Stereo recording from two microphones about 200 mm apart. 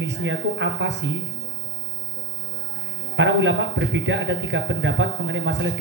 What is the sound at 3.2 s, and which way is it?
Speech, 65° right (ahead or behind).